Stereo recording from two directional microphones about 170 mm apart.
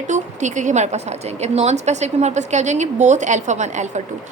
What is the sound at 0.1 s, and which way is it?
A woman's voice, 45° right (ahead or behind).